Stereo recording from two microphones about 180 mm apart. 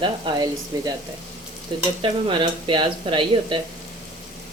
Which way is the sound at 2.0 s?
30° right (ahead or behind).